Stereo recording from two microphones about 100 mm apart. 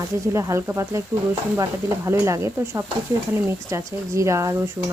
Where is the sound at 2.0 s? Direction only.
30° right (ahead or behind).